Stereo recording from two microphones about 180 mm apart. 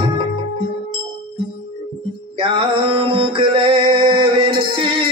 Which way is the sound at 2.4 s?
30° right (ahead or behind).